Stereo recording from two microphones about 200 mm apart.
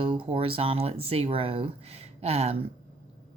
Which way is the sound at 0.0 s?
25° right (ahead or behind).